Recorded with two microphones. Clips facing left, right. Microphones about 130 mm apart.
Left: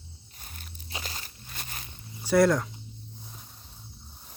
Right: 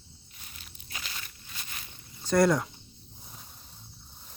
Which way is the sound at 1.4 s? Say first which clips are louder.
Left 3 dB; 50° left (ahead or behind).